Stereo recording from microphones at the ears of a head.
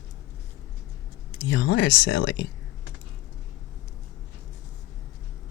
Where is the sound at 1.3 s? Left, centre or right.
Left.